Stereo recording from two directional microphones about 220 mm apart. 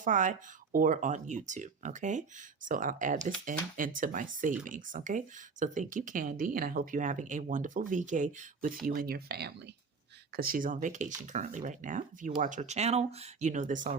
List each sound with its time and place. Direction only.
0.0 s speech: 35° right (ahead or behind)